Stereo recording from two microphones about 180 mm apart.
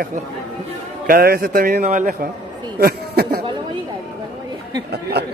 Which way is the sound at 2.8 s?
55° right (ahead or behind).